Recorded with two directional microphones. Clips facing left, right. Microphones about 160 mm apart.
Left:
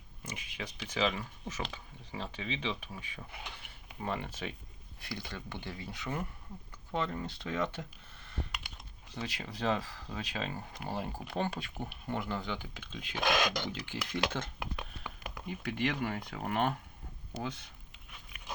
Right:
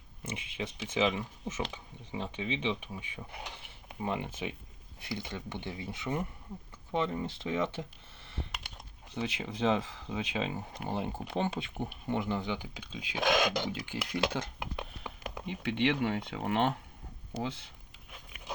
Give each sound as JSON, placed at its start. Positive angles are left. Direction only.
{"t": 0.3, "sound": "speech", "side_deg": -25}
{"t": 12.8, "sound": "speech", "side_deg": 50}
{"t": 13.1, "sound": "speech", "side_deg": -10}
{"t": 14.0, "sound": "speech", "side_deg": -25}